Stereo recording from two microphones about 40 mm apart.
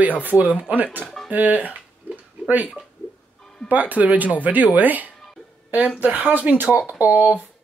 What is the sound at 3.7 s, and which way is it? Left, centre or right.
Speech, right.